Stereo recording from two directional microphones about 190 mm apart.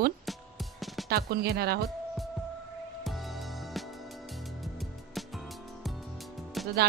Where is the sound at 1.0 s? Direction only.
55° right (ahead or behind).